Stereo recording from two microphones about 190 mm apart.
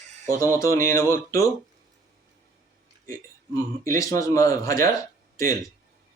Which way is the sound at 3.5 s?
15° left (ahead or behind).